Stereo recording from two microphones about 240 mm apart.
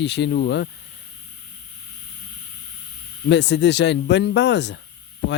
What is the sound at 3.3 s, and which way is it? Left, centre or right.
Speech, left.